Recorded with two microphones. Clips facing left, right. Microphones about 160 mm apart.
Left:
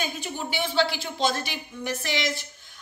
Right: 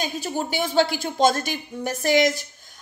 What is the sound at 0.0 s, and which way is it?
A woman's voice, 40° right (ahead or behind).